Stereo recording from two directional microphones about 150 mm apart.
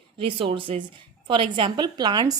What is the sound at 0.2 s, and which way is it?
A woman's voice, 35° right (ahead or behind).